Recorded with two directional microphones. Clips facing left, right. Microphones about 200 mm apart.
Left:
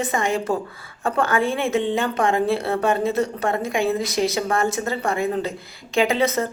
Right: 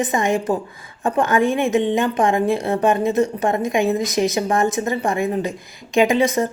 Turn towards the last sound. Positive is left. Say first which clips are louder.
# right 3 dB
turn(degrees=-15)  # may be behind; listen again after turning